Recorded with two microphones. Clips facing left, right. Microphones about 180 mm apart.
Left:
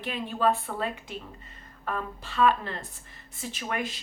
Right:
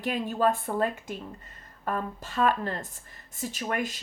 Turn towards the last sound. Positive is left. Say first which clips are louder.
# right 2 dB
turn(degrees=-45)  # may be behind; listen again after turning